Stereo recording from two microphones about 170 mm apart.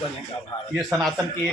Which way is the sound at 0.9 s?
5° left (ahead or behind).